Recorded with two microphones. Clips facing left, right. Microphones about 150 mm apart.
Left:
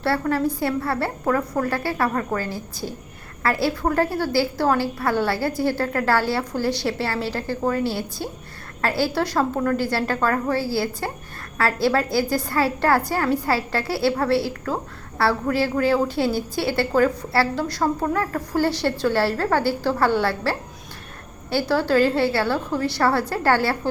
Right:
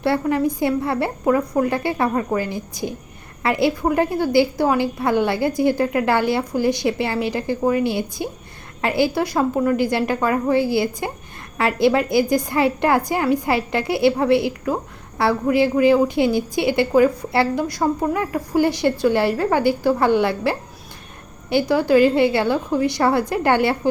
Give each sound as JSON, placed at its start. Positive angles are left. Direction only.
{"t": 0.0, "sound": "a woman's voice", "side_deg": -15}